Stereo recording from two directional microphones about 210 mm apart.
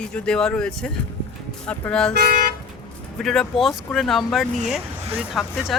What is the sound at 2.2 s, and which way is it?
Toot, 45° right (ahead or behind).